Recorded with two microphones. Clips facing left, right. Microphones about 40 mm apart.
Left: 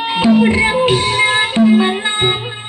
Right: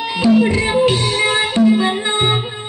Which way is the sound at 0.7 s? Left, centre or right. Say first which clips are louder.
Left 1 dB; left.